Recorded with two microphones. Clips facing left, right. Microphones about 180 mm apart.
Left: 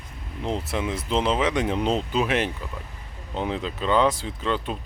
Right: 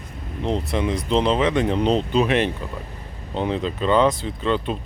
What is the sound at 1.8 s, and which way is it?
Speech, 20° right (ahead or behind).